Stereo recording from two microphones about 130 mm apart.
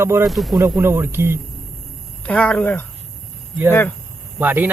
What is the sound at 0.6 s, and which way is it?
Speech, 15° right (ahead or behind).